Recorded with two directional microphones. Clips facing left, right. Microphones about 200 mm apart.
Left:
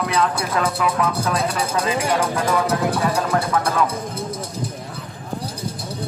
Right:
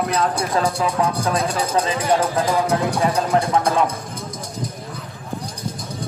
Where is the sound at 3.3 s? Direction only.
25° right (ahead or behind).